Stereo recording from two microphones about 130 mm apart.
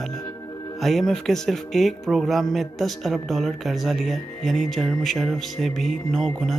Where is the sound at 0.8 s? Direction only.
Centre (ahead or behind).